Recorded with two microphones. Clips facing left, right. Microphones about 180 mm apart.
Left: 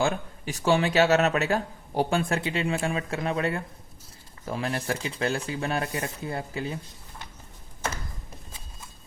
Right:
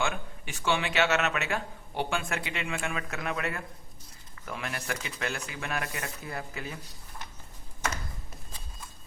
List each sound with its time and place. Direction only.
0.0 s speech: 35° left (ahead or behind)